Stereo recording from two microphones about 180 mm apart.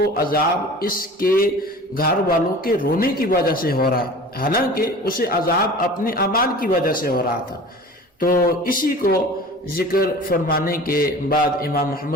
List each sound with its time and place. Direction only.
0.0 s a man's voice: 55° left (ahead or behind)